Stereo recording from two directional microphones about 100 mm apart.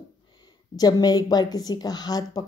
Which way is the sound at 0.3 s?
45° left (ahead or behind).